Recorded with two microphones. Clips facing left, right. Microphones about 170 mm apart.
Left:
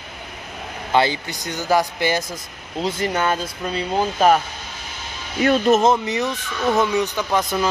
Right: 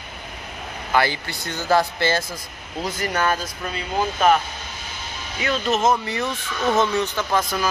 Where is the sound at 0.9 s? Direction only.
20° left (ahead or behind).